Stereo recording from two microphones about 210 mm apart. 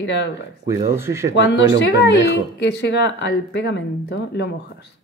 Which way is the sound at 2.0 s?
55° left (ahead or behind).